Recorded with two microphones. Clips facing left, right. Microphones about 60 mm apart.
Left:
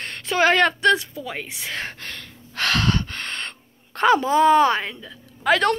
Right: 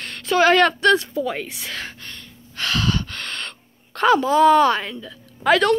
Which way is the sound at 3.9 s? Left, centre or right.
Left.